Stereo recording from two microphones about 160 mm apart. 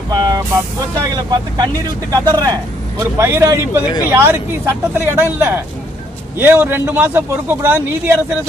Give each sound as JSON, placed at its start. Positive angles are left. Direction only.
{"t": 0.1, "sound": "vehicle", "side_deg": -25}
{"t": 1.0, "sound": "a man's voice", "side_deg": -25}